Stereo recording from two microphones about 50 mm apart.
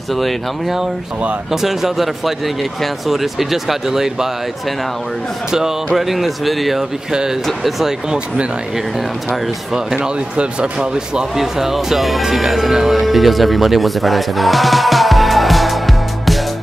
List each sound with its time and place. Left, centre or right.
0.1 s speech: centre
5.9 s speech: centre
7.1 s speech: centre
7.4 s speech: centre
9.8 s speech: centre
11.3 s speech: centre